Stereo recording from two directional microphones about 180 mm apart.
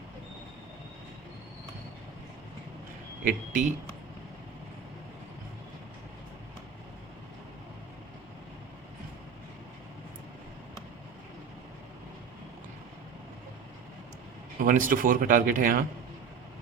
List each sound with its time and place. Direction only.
3.2 s speech: 45° right (ahead or behind)
14.6 s speech: 50° right (ahead or behind)